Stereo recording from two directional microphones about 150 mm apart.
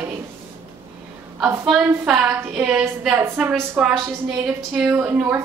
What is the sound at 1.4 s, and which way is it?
Speech, 15° right (ahead or behind).